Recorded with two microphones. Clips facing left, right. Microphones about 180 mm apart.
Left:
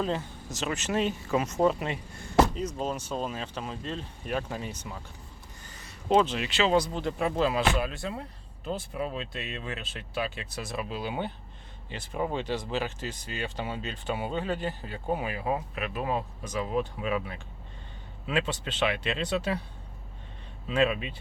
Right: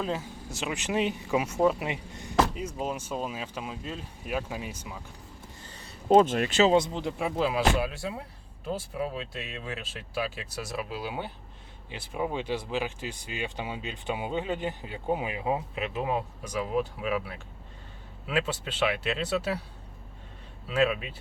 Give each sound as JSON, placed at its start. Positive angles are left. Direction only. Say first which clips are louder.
{"t": 0.0, "sound": "speech", "louder": "left 1 dB", "side_deg": -5}
{"t": 5.6, "sound": "a sound", "louder": "right 2 dB", "side_deg": -30}
{"t": 6.1, "sound": "speech", "louder": "right 4 dB", "side_deg": -50}
{"t": 6.7, "sound": "speech", "louder": "right 2 dB", "side_deg": -25}
{"t": 7.0, "sound": "speech", "louder": "left 1 dB", "side_deg": -5}
{"t": 20.7, "sound": "speech", "louder": "even", "side_deg": -5}